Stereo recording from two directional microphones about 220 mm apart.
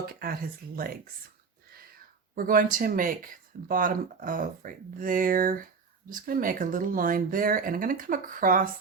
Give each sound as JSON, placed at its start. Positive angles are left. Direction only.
{"t": 0.0, "sound": "speech", "side_deg": -45}
{"t": 2.3, "sound": "speech", "side_deg": -40}